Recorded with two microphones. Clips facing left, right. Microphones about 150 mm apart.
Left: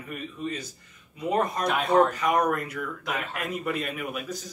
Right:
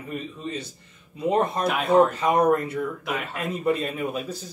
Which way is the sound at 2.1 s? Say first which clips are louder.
Right 4 dB; 30° right (ahead or behind).